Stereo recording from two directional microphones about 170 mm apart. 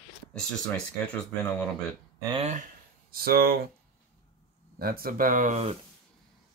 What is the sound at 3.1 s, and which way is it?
Speech, 60° right (ahead or behind).